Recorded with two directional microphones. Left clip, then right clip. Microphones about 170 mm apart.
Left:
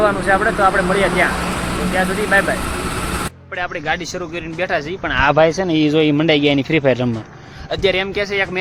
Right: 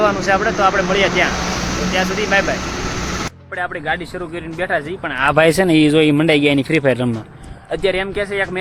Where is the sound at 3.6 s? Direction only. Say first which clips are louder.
Even; 5° left (ahead or behind).